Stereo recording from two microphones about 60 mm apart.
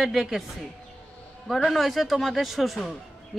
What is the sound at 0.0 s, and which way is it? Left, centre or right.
Speech, centre.